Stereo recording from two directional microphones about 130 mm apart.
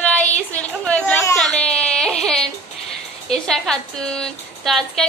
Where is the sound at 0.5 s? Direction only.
10° left (ahead or behind).